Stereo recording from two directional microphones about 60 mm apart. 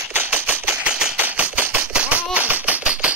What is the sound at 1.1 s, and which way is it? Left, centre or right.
Gunshot, right.